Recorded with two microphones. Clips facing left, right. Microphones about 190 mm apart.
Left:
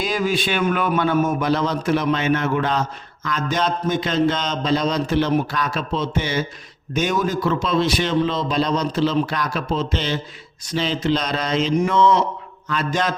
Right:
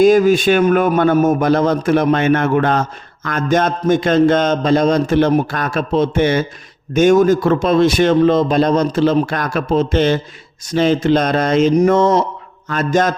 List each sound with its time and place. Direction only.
0.0 s a man's voice: 45° right (ahead or behind)